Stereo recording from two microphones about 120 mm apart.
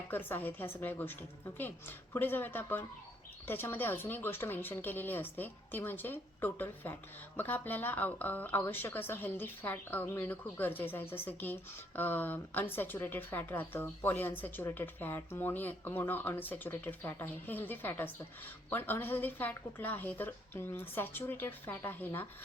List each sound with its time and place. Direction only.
0.1 s speech: 15° left (ahead or behind)